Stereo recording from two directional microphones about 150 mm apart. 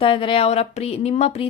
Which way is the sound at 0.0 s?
35° left (ahead or behind).